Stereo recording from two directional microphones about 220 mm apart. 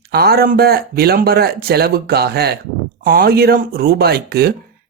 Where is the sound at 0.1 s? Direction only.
45° right (ahead or behind).